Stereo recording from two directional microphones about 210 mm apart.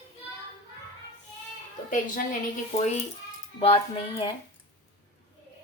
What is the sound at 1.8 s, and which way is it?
Speech, 40° left (ahead or behind).